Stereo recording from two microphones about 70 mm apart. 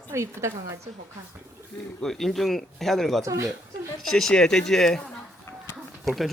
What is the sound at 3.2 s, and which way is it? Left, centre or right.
Speech, right.